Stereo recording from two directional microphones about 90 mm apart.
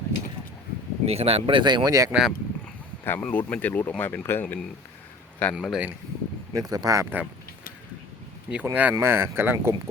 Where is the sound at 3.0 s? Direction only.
25° left (ahead or behind).